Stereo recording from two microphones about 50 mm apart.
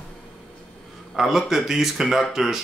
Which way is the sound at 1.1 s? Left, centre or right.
Centre.